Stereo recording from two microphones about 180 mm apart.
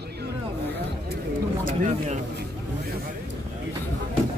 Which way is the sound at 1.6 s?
45° right (ahead or behind).